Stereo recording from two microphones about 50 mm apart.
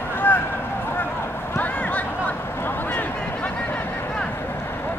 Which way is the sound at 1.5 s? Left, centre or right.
Left.